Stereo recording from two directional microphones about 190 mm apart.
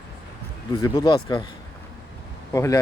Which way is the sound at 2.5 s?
15° left (ahead or behind).